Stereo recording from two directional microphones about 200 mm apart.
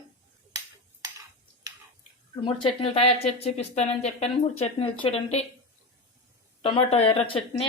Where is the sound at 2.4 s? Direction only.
30° left (ahead or behind).